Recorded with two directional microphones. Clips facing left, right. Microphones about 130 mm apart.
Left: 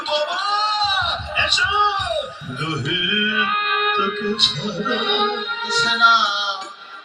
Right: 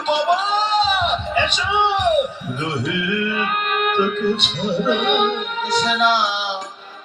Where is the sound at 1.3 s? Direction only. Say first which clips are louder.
Right 3 dB; 55° right (ahead or behind).